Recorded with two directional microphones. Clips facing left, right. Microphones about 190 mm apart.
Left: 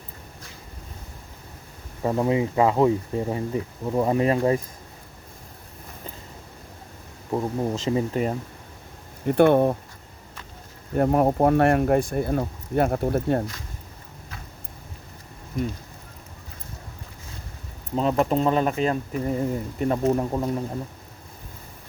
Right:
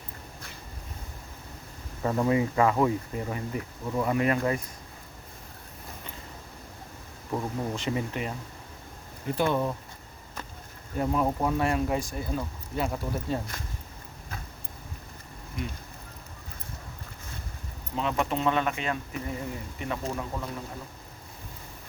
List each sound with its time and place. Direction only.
2.0 s speech: 20° left (ahead or behind)
7.3 s speech: 25° left (ahead or behind)
9.2 s speech: 60° left (ahead or behind)
10.9 s speech: 55° left (ahead or behind)
17.9 s speech: 40° left (ahead or behind)